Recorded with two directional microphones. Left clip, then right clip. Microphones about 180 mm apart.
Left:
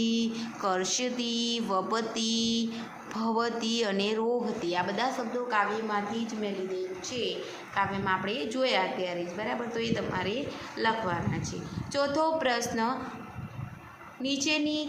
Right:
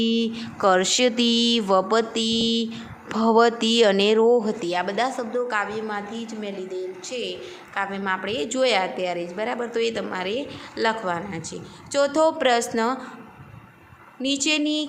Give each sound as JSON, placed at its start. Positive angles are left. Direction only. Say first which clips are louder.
{"t": 0.0, "sound": "mantra", "louder": "right 7 dB", "side_deg": -40}
{"t": 7.8, "sound": "a woman's voice", "louder": "right 3 dB", "side_deg": -55}
{"t": 14.2, "sound": "a woman's voice", "louder": "right 6 dB", "side_deg": -60}